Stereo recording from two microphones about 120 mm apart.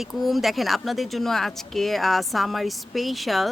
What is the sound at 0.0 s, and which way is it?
Speech, centre (ahead or behind).